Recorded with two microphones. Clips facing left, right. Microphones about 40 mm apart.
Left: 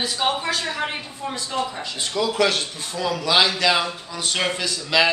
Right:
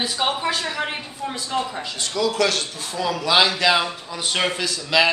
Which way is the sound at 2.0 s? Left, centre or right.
Centre.